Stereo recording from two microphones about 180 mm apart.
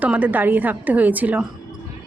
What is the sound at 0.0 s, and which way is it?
A woman's voice, 10° right (ahead or behind).